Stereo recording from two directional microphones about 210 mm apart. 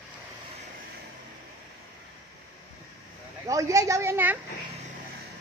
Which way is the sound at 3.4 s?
15° right (ahead or behind).